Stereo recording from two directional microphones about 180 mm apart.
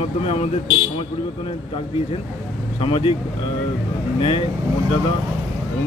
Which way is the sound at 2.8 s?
30° left (ahead or behind).